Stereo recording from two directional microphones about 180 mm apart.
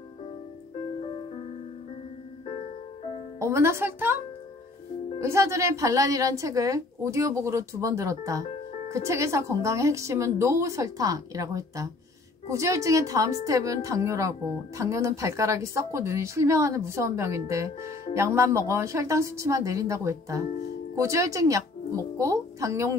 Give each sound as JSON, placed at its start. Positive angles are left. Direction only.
{"t": 3.3, "sound": "a woman's voice", "side_deg": -15}
{"t": 5.2, "sound": "a woman's voice", "side_deg": -15}